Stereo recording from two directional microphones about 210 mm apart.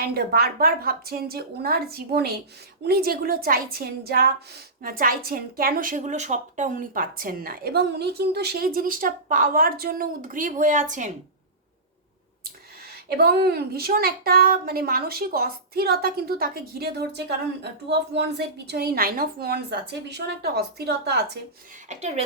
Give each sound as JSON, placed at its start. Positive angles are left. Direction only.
{"t": 0.0, "sound": "a woman's voice", "side_deg": -45}
{"t": 13.1, "sound": "a woman's voice", "side_deg": -50}
{"t": 21.8, "sound": "a woman's voice", "side_deg": -30}